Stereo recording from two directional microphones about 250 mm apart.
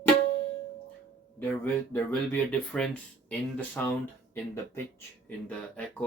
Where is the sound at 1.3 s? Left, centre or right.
Centre.